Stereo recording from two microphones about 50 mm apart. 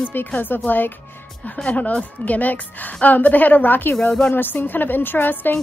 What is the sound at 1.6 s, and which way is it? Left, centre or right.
A woman's voice, left.